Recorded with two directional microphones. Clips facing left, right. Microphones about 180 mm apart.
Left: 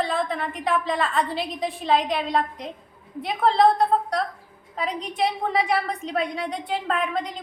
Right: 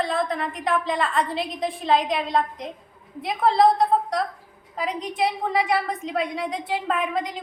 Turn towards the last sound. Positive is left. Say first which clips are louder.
# right 1 dB
turn(degrees=-5)  # may be behind; listen again after turning